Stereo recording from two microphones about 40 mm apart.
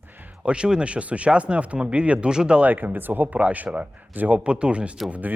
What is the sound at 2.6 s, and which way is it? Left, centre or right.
A man's voice, right.